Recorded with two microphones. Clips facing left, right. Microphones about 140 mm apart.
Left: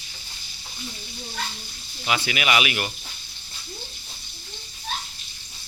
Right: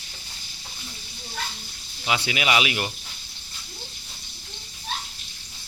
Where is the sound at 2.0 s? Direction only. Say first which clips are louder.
Even; 20° right (ahead or behind).